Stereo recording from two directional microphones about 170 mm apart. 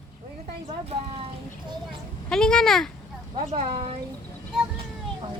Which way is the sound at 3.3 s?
35° right (ahead or behind).